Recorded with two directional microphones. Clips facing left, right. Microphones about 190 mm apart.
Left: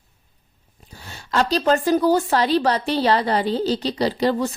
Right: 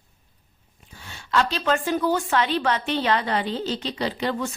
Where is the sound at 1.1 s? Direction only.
40° left (ahead or behind).